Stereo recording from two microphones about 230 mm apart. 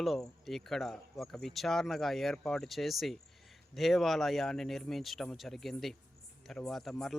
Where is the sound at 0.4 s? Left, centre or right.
Centre.